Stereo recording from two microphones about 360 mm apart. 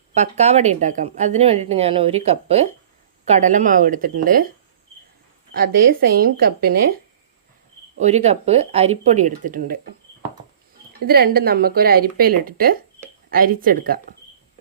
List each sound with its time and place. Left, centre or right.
0.2 s a woman's voice: centre
5.9 s speech: right
7.9 s speech: centre
11.0 s speech: right